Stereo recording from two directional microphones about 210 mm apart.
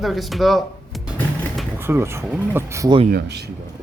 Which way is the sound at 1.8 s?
10° right (ahead or behind).